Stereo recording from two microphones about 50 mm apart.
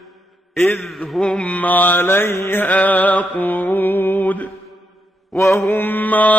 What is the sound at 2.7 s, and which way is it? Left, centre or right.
Mantra, left.